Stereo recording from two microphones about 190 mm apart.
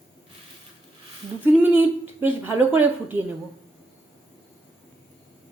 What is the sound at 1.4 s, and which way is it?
A woman's voice, 10° right (ahead or behind).